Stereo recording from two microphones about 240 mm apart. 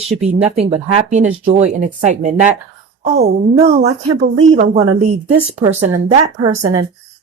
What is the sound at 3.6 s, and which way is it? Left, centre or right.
Speech, right.